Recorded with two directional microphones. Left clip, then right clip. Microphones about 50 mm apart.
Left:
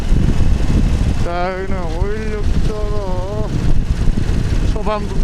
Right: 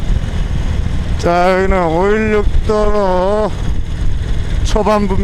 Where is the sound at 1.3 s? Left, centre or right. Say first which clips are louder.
Right 10 dB; centre.